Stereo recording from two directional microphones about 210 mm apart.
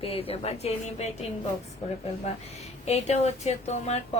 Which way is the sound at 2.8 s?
30° left (ahead or behind).